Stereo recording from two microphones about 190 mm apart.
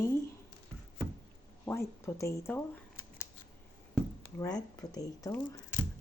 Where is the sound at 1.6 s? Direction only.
15° left (ahead or behind).